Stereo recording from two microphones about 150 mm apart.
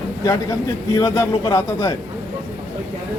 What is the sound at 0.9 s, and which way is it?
Speech, 25° left (ahead or behind).